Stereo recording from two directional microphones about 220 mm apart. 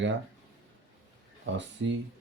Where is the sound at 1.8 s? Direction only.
60° right (ahead or behind).